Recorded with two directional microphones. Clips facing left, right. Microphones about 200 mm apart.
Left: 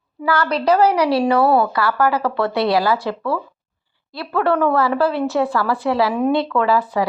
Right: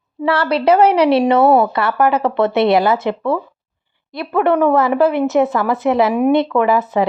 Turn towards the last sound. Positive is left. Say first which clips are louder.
# right 3 dB
turn(degrees=-20)  # may be behind; listen again after turning